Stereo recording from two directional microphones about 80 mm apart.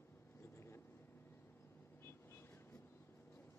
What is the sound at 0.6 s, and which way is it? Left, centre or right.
Vehicle, left.